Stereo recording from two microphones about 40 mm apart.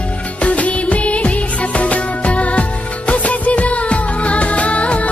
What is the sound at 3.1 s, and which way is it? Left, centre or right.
Music, left.